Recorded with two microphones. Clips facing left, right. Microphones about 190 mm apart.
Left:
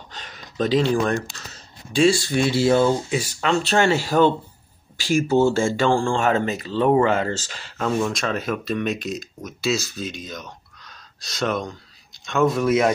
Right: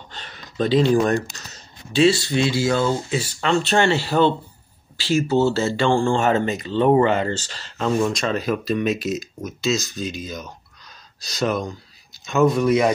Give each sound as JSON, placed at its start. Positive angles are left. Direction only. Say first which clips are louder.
{"t": 0.2, "sound": "a sound", "louder": "right 1 dB", "side_deg": 5}
{"t": 2.5, "sound": "speech", "louder": "left 3 dB", "side_deg": 25}
{"t": 3.2, "sound": "speech", "louder": "right 1 dB", "side_deg": 0}
{"t": 5.9, "sound": "speech", "louder": "right 2 dB", "side_deg": 0}